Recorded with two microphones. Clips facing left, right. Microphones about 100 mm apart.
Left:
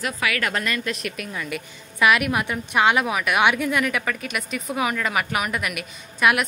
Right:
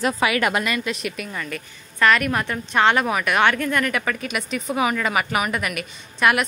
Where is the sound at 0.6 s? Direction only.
5° right (ahead or behind).